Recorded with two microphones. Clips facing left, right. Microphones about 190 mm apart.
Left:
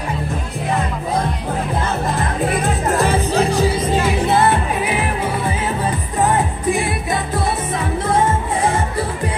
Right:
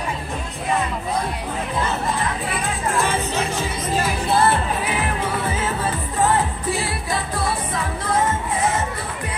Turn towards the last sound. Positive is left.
turn(degrees=20)  # may be behind; listen again after turning